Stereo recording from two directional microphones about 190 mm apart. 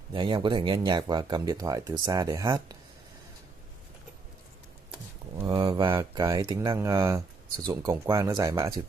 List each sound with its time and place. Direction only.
0.1 s speech: 25° right (ahead or behind)
5.4 s speech: 20° right (ahead or behind)